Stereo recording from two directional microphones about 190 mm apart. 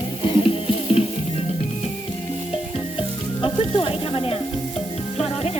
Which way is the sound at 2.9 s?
25° left (ahead or behind).